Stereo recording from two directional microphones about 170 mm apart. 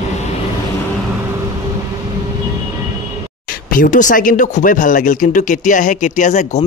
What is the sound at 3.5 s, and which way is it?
Speech, 55° left (ahead or behind).